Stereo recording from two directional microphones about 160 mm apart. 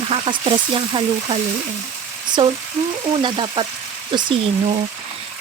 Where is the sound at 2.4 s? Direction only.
25° right (ahead or behind).